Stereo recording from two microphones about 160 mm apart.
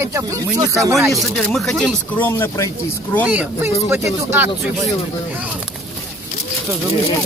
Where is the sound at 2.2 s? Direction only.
15° left (ahead or behind).